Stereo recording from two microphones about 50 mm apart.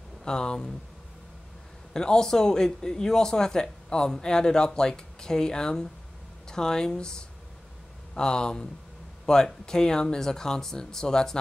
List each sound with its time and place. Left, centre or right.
0.2 s speech: centre
2.0 s speech: centre